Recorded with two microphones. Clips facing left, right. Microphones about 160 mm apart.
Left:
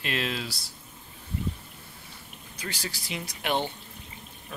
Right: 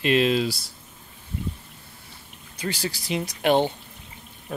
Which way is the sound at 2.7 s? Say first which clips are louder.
Right 9 dB; 35° right (ahead or behind).